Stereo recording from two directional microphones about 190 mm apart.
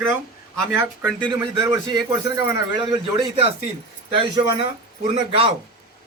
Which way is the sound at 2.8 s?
25° right (ahead or behind).